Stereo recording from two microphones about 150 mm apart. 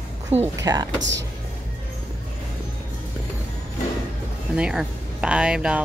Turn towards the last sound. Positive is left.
turn(degrees=-5)  # may be behind; listen again after turning